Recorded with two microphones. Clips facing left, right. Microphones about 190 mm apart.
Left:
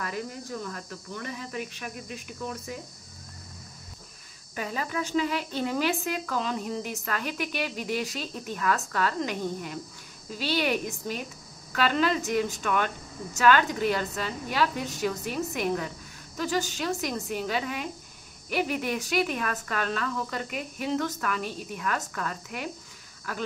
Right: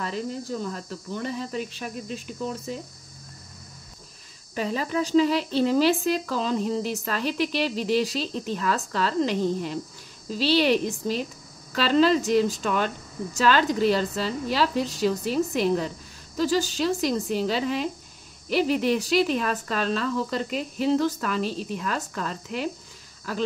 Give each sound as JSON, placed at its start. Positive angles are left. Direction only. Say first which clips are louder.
{"t": 0.0, "sound": "speech", "louder": "right 4 dB", "side_deg": -30}
{"t": 4.6, "sound": "a woman's voice", "louder": "right 5 dB", "side_deg": -30}